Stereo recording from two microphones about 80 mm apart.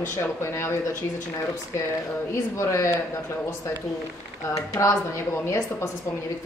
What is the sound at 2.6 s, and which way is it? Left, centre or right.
Speech, left.